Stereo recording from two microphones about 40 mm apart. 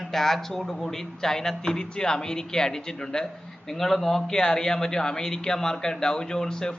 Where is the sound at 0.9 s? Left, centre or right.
Centre.